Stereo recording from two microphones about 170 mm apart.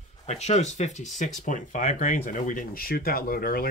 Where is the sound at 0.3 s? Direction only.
40° left (ahead or behind).